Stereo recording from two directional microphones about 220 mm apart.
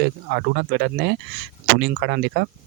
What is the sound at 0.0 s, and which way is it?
Speech, 50° right (ahead or behind).